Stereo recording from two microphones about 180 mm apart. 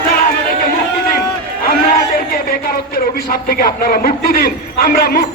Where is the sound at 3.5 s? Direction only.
55° left (ahead or behind).